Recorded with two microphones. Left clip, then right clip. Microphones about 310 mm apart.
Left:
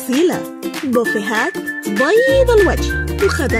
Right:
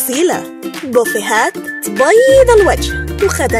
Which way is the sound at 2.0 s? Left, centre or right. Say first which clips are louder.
Right 5 dB; right.